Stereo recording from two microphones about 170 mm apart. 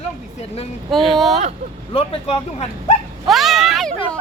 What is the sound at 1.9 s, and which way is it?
Speech, 35° left (ahead or behind).